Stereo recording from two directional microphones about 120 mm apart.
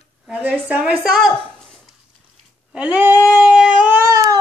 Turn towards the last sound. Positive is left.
turn(degrees=-25)  # may be behind; listen again after turning